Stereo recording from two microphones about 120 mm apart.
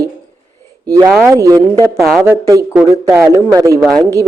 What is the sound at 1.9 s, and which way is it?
Speech, centre (ahead or behind).